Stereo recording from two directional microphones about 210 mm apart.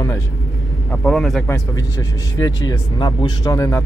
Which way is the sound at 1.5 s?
15° left (ahead or behind).